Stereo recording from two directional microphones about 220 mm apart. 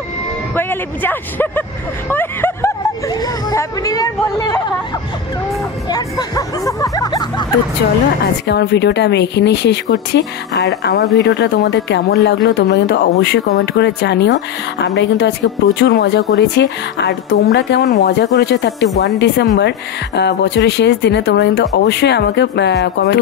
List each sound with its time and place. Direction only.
0.6 s speech: 10° left (ahead or behind)
5.9 s speech: 20° left (ahead or behind)
8.5 s speech: 50° left (ahead or behind)